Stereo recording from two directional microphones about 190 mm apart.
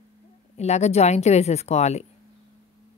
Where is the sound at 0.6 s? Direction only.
35° left (ahead or behind).